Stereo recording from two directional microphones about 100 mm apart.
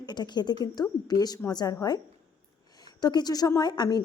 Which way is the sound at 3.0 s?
45° left (ahead or behind).